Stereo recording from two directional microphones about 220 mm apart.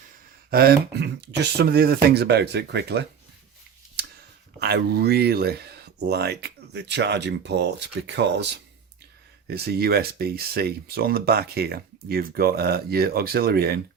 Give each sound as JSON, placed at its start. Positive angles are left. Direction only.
{"t": 0.5, "sound": "speech", "side_deg": -45}
{"t": 4.6, "sound": "speech", "side_deg": -50}